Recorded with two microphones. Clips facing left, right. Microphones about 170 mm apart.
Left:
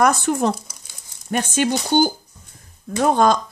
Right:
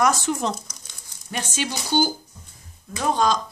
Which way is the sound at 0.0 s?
55° left (ahead or behind).